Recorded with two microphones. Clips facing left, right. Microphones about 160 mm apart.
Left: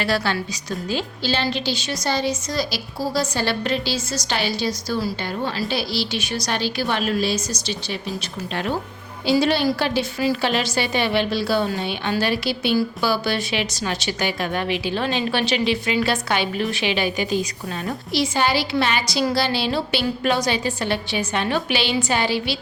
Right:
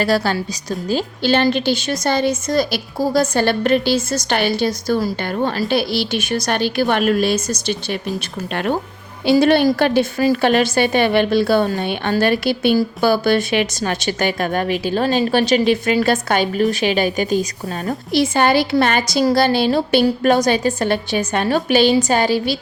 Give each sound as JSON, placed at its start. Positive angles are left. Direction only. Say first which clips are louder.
{"t": 0.0, "sound": "a woman's voice", "louder": "right 5 dB", "side_deg": -40}
{"t": 1.2, "sound": "a woman's voice", "louder": "right 9 dB", "side_deg": -55}
{"t": 9.2, "sound": "a woman's voice", "louder": "right 6 dB", "side_deg": -55}